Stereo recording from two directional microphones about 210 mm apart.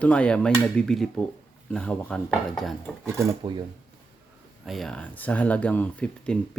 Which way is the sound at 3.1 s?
15° right (ahead or behind).